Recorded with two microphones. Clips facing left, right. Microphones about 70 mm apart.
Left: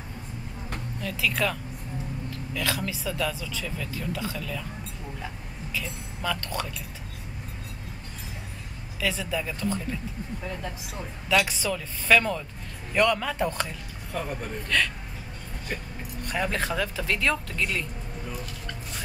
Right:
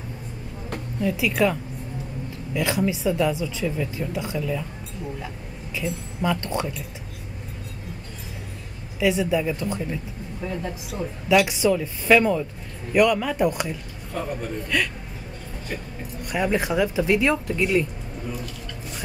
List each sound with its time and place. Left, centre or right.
1.0 s speech: centre
5.8 s speech: right
9.0 s speech: centre
16.3 s speech: centre